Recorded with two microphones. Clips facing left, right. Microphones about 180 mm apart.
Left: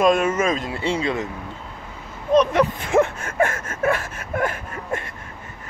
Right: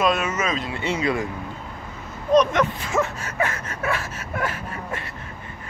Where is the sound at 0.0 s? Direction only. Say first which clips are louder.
Left 5 dB; 50° left (ahead or behind); by 1.3 s 25° left (ahead or behind).